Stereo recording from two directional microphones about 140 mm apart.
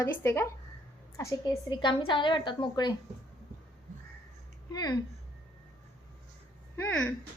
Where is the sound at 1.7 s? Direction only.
35° left (ahead or behind).